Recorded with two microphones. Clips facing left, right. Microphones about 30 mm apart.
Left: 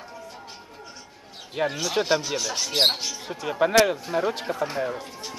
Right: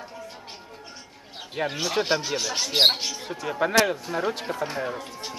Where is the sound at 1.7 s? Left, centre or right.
Centre.